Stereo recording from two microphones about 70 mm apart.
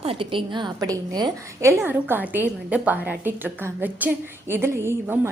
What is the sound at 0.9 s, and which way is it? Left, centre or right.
Speech, right.